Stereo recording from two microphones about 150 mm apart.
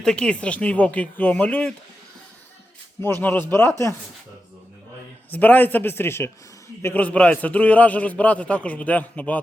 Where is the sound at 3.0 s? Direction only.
15° left (ahead or behind).